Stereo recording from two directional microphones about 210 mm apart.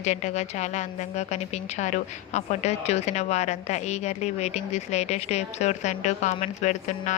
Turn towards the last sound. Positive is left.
turn(degrees=35)  # may be behind; listen again after turning